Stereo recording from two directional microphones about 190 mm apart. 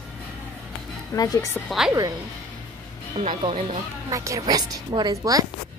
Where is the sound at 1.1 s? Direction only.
15° left (ahead or behind).